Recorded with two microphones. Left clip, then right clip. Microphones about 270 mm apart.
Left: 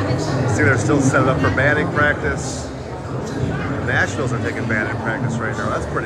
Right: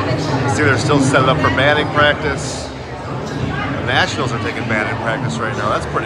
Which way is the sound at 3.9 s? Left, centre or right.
Centre.